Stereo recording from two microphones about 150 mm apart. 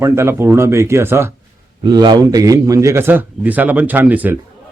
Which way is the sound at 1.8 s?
30° right (ahead or behind).